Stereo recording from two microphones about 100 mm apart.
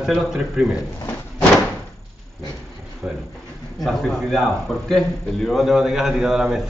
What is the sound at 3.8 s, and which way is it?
A man's voice, centre (ahead or behind).